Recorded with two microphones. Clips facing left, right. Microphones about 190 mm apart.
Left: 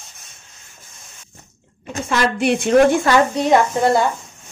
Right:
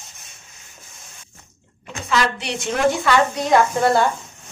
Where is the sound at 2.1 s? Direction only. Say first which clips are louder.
Left 5 dB; 50° left (ahead or behind).